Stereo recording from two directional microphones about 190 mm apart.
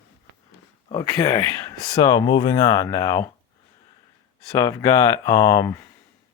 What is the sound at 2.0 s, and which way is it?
Speech, 20° left (ahead or behind).